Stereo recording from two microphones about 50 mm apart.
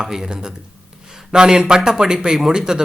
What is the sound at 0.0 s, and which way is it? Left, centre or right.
Speech, centre.